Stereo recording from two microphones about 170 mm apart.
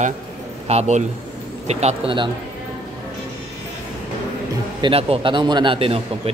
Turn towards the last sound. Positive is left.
turn(degrees=-30)  # may be behind; listen again after turning